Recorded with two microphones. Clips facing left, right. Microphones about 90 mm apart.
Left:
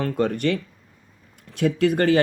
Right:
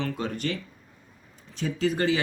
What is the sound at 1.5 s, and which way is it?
Speech, 65° left (ahead or behind).